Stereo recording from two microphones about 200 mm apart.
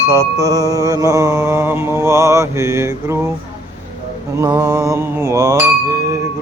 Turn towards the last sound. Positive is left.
turn(degrees=-15)  # may be behind; listen again after turning